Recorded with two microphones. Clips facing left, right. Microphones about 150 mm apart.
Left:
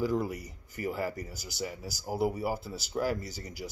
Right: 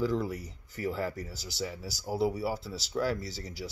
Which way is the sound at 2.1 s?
50° left (ahead or behind).